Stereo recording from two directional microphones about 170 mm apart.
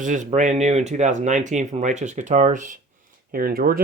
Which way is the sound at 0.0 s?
45° right (ahead or behind).